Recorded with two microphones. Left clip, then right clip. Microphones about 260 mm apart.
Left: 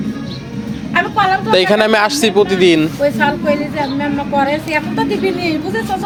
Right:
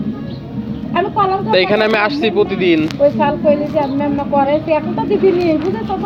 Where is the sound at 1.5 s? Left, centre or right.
Left.